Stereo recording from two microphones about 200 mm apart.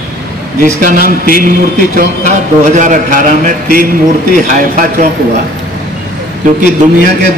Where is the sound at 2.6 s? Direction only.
40° right (ahead or behind).